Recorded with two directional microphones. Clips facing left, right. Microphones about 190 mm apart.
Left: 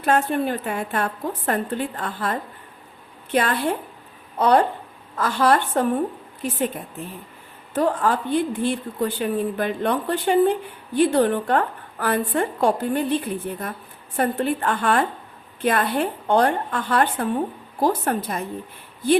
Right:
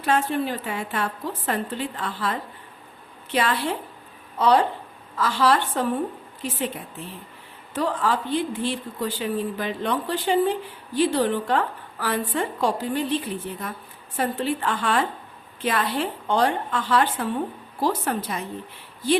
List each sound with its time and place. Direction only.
0.0 s a woman's voice: 50° left (ahead or behind)